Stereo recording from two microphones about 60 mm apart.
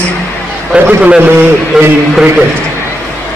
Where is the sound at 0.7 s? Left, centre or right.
Right.